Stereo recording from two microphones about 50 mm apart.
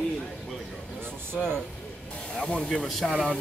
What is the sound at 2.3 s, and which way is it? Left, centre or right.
Spray, left.